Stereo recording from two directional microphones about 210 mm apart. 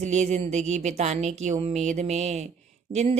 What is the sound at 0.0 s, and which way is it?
A woman's voice, 35° right (ahead or behind).